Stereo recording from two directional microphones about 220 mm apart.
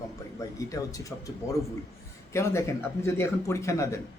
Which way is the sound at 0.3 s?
15° left (ahead or behind).